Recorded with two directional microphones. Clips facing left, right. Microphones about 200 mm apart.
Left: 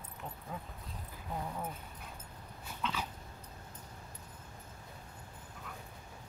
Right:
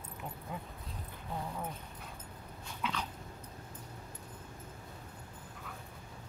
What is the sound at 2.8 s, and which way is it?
Dog, 10° right (ahead or behind).